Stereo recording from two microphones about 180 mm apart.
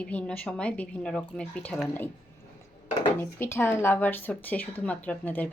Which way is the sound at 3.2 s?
10° left (ahead or behind).